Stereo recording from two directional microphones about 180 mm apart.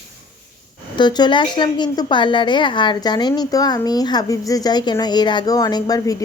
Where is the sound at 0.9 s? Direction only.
25° left (ahead or behind).